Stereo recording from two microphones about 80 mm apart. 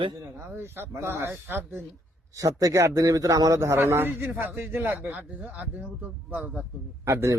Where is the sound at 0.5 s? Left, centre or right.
Right.